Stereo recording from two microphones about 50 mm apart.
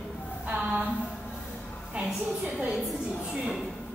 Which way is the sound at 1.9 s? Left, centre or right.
Right.